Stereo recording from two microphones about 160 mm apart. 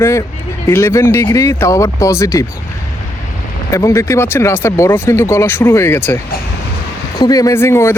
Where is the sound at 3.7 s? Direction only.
20° left (ahead or behind).